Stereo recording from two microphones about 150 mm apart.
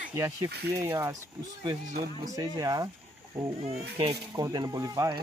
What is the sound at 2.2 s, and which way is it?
Speech, 25° right (ahead or behind).